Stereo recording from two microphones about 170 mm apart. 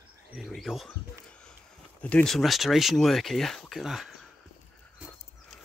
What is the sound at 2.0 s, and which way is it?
Speech, 5° left (ahead or behind).